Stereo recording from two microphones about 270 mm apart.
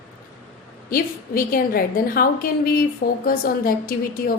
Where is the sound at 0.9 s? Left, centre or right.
Left.